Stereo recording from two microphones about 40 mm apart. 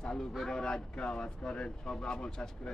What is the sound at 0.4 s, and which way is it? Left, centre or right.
Speech, centre.